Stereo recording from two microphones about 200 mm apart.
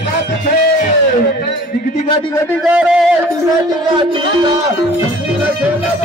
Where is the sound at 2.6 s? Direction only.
5° right (ahead or behind).